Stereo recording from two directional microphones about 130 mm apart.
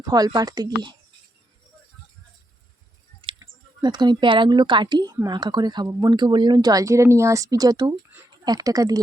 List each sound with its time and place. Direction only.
0.0 s speech: 30° right (ahead or behind)
3.2 s clicking: 40° right (ahead or behind)
3.8 s speech: 35° right (ahead or behind)